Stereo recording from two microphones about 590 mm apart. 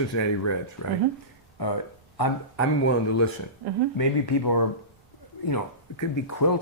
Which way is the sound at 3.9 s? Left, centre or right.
Left.